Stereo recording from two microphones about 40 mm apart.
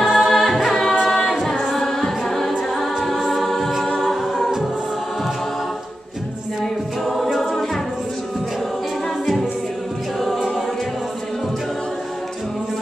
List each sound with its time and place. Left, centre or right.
0.0 s music: centre
1.1 s a capella: centre
1.8 s music: centre
2.8 s a capella: centre
3.3 s choir: centre
4.0 s a capella: centre
6.6 s choir: centre
9.2 s a capella: centre